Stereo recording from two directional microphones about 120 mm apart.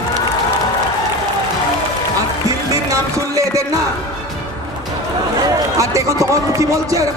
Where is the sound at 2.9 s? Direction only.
25° right (ahead or behind).